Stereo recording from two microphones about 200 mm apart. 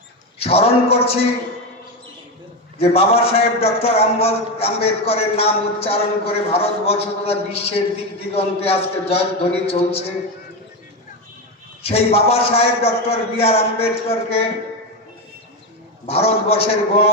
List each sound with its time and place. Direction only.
0.3 s a man's voice: 30° left (ahead or behind)
2.7 s a man's voice: 30° left (ahead or behind)
11.8 s a man's voice: 30° left (ahead or behind)
16.0 s a man's voice: 30° left (ahead or behind)